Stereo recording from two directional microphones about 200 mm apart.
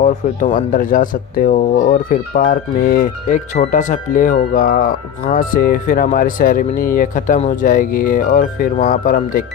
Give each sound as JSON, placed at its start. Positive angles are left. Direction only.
{"t": 0.0, "sound": "speech", "side_deg": 35}